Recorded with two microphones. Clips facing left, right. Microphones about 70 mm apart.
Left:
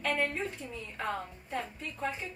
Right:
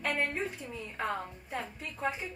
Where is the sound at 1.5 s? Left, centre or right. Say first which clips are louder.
Left 2 dB; centre.